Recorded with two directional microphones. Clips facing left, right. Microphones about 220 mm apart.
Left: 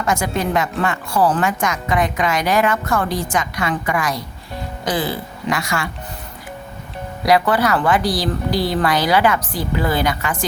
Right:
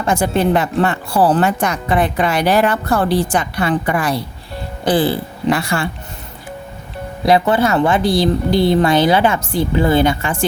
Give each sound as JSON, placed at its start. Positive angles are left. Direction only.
{"t": 0.0, "sound": "speech", "side_deg": -30}
{"t": 7.2, "sound": "a woman's voice", "side_deg": -25}